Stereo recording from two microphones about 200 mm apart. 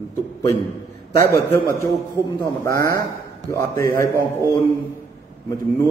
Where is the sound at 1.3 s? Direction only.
10° left (ahead or behind).